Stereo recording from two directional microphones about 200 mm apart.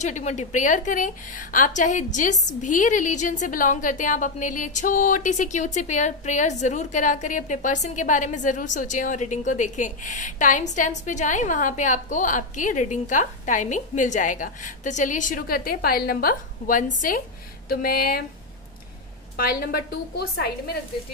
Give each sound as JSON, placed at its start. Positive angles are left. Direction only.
{"t": 0.0, "sound": "a woman's voice", "side_deg": 35}
{"t": 19.3, "sound": "a woman's voice", "side_deg": 45}